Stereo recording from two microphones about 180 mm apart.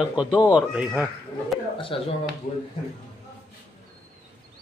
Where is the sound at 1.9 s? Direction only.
30° left (ahead or behind).